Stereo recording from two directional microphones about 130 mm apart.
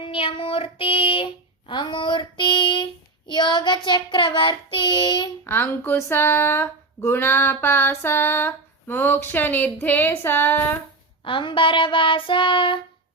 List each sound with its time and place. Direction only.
0.0 s speech: 45° left (ahead or behind)
5.5 s a sound: 15° left (ahead or behind)
11.3 s speech: 40° left (ahead or behind)